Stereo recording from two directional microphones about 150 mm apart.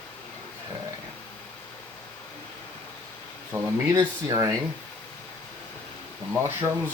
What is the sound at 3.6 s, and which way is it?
Speech, 15° right (ahead or behind).